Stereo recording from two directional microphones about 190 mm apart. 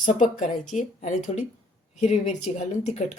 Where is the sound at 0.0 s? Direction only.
45° left (ahead or behind).